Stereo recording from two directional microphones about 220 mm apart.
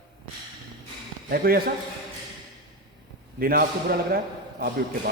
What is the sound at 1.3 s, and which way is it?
Speech, 45° right (ahead or behind).